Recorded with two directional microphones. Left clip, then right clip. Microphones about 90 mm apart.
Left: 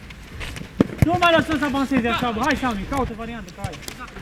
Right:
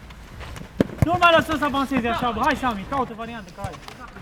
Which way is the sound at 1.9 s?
25° right (ahead or behind).